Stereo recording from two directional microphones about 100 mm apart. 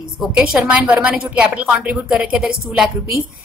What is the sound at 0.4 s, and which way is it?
A woman's voice, 10° right (ahead or behind).